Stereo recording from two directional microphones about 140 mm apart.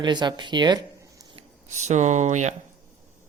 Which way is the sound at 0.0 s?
30° right (ahead or behind).